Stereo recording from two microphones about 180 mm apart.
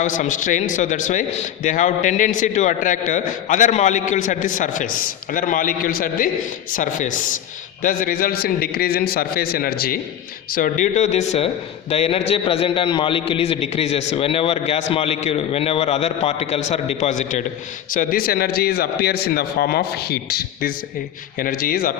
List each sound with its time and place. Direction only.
0.0 s a man's voice: 45° left (ahead or behind)
10.5 s a man's voice: 45° left (ahead or behind)